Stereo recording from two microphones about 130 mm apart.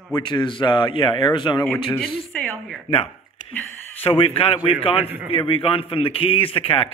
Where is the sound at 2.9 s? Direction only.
45° left (ahead or behind).